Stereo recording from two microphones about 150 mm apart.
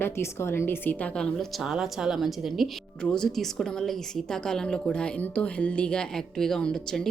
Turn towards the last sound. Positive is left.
turn(degrees=5)  # may be behind; listen again after turning